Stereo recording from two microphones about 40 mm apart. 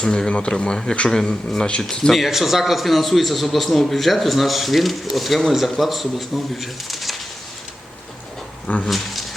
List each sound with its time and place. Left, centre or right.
0.0 s speech: centre
2.1 s a man's voice: centre
8.7 s speech: left